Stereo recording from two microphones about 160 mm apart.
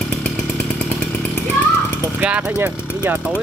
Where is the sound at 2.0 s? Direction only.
10° right (ahead or behind).